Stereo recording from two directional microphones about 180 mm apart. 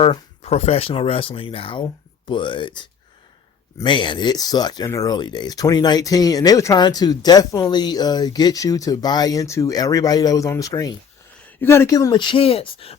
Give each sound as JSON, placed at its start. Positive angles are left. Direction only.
{"t": 0.0, "sound": "speech", "side_deg": 30}
{"t": 3.8, "sound": "speech", "side_deg": 25}